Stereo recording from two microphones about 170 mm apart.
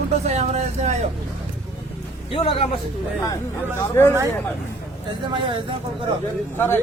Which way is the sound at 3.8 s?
15° left (ahead or behind).